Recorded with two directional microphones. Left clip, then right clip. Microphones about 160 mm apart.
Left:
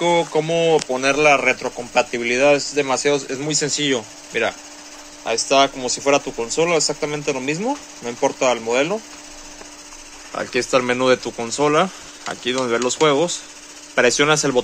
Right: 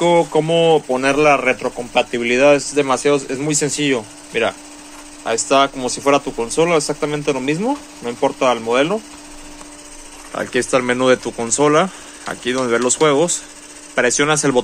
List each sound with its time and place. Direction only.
0.0 s speech: centre (ahead or behind)
2.3 s speech: 5° right (ahead or behind); by 4.6 s 15° left (ahead or behind)
5.5 s speech: centre (ahead or behind)
10.3 s speech: 5° left (ahead or behind)